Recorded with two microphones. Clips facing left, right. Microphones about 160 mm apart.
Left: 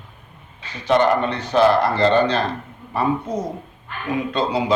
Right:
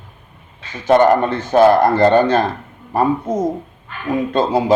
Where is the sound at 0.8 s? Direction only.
50° right (ahead or behind).